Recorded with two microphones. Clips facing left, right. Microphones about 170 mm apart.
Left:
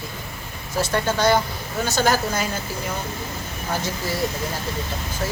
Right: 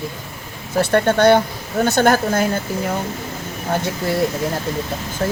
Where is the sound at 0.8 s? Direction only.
60° right (ahead or behind).